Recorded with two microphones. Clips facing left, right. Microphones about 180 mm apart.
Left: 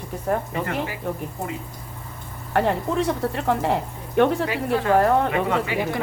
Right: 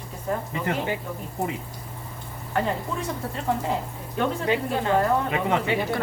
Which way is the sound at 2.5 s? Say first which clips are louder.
Left 5 dB; 65° left (ahead or behind).